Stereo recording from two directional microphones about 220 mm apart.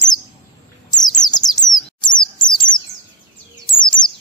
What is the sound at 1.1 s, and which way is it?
Bird, 20° left (ahead or behind).